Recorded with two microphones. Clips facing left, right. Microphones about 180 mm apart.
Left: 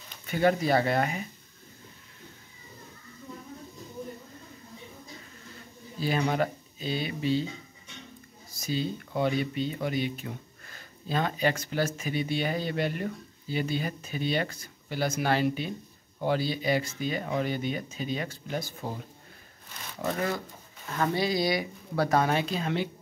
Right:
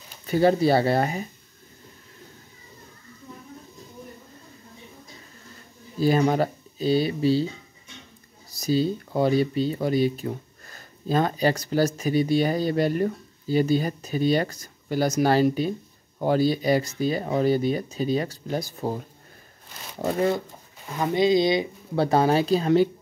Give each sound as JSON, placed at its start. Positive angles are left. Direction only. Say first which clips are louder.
{"t": 0.3, "sound": "speech", "louder": "right 5 dB", "side_deg": -30}
{"t": 5.9, "sound": "speech", "louder": "right 7 dB", "side_deg": -40}
{"t": 8.5, "sound": "speech", "louder": "right 8 dB", "side_deg": -35}
{"t": 20.0, "sound": "speech", "louder": "right 7 dB", "side_deg": -30}
{"t": 20.8, "sound": "speech", "louder": "right 6 dB", "side_deg": -15}